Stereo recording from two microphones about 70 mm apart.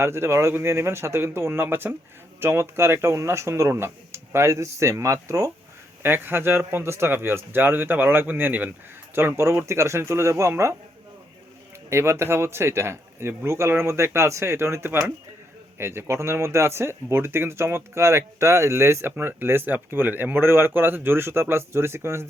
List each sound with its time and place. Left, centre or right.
0.0 s speech: right
6.0 s speech: right
9.1 s speech: right
11.9 s speech: right